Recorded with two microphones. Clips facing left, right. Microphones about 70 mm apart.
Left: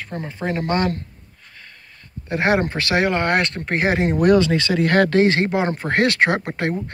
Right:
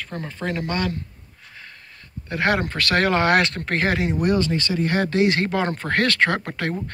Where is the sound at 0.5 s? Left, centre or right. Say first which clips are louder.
Left 5 dB; left.